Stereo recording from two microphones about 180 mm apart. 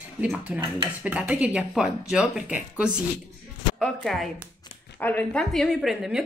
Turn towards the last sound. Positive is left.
turn(degrees=-5)  # may be behind; listen again after turning